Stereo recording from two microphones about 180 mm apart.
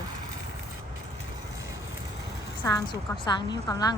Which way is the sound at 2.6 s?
20° left (ahead or behind).